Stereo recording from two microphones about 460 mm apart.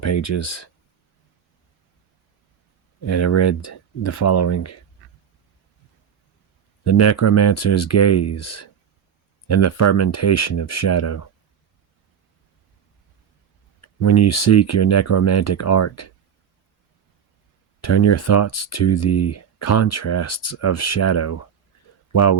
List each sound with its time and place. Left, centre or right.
0.0 s speech: left
3.0 s speech: left
6.8 s speech: left
13.8 s speech: left
17.7 s speech: left